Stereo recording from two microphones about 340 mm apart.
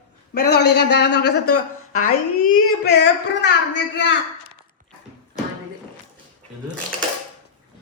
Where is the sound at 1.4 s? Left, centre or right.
Left.